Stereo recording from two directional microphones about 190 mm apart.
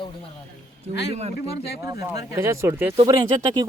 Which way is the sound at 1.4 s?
55° left (ahead or behind).